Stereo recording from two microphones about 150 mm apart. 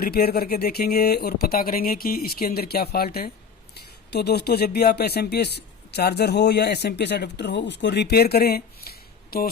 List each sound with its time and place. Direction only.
0.0 s speech: 90° left